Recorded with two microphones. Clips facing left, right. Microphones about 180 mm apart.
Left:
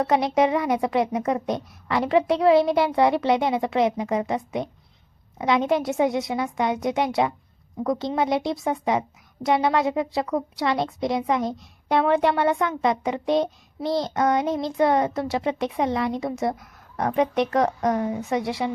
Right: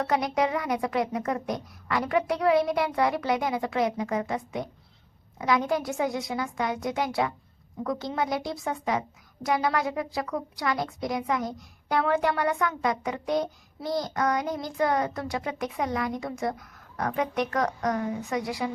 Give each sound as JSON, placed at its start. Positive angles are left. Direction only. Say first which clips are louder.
{"t": 0.0, "sound": "a woman's voice", "louder": "left 5 dB", "side_deg": 20}